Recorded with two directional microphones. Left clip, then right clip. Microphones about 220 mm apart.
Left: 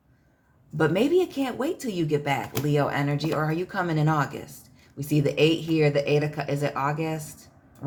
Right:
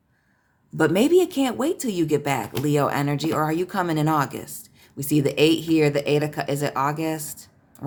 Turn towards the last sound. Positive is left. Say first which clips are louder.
# right 3 dB
turn(degrees=-25)  # may be behind; listen again after turning